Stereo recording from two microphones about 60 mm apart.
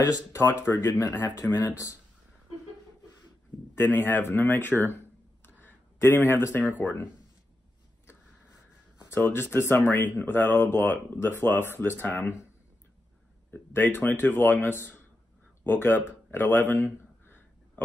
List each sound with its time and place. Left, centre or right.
0.0 s speech: left
0.4 s speech: left
0.9 s speech: left
3.7 s speech: left
9.1 s speech: left
13.5 s speech: left